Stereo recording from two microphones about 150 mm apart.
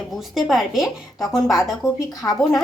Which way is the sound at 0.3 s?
Centre (ahead or behind).